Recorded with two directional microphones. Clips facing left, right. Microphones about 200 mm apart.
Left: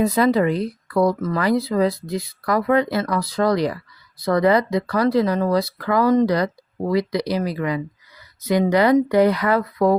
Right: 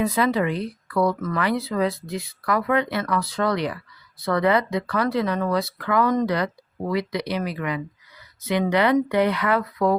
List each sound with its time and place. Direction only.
0.0 s speech: 40° left (ahead or behind)